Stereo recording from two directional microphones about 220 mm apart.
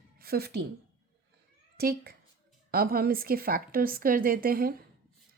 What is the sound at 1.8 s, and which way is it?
Speech, 45° right (ahead or behind).